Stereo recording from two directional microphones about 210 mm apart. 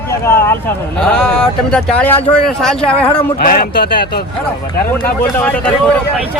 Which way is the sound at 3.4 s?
45° left (ahead or behind).